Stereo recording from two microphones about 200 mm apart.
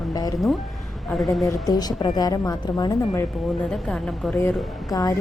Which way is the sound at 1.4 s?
15° left (ahead or behind).